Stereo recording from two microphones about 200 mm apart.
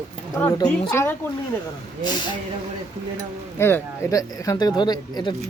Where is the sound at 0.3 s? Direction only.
10° left (ahead or behind).